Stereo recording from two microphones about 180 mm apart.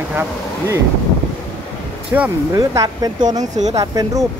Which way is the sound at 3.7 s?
20° right (ahead or behind).